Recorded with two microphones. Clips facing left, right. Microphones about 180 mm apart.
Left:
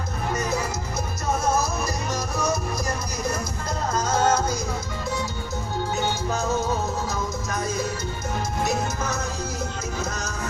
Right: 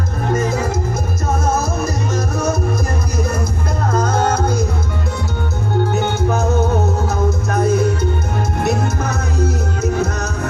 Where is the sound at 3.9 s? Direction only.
55° right (ahead or behind).